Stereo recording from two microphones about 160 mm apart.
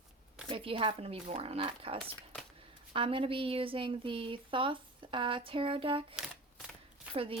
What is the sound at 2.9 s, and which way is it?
A woman's voice, 35° right (ahead or behind).